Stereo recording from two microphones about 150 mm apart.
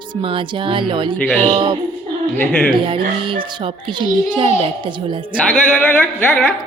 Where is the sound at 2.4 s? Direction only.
10° left (ahead or behind).